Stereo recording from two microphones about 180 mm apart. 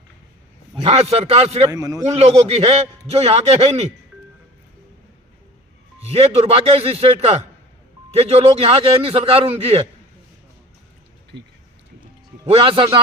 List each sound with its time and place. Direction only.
0.8 s a man's voice: 35° right (ahead or behind)
1.7 s a man's voice: 20° right (ahead or behind)
2.0 s a man's voice: 35° right (ahead or behind)
6.1 s a man's voice: 35° right (ahead or behind)
12.5 s a man's voice: 30° right (ahead or behind)